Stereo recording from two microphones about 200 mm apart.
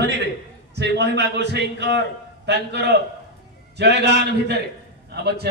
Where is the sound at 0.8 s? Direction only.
55° right (ahead or behind).